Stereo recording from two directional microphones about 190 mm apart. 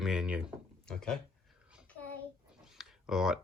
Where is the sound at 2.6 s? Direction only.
5° right (ahead or behind).